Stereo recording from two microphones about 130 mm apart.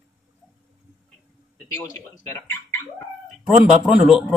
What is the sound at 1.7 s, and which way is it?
Speech, 20° left (ahead or behind).